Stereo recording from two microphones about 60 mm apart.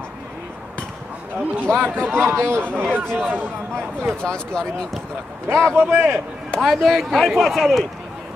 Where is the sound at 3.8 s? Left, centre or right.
Right.